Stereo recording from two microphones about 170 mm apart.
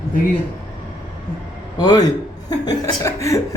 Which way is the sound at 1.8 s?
25° left (ahead or behind).